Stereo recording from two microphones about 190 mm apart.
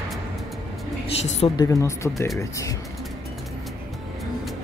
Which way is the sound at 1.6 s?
15° left (ahead or behind).